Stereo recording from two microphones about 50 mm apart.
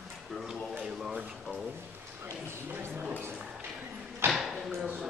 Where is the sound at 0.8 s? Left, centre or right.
Centre.